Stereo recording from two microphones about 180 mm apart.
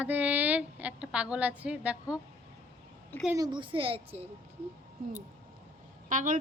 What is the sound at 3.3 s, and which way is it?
Speech, 25° right (ahead or behind).